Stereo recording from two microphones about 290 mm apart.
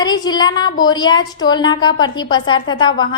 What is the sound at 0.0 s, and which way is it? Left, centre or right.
A woman's voice, centre.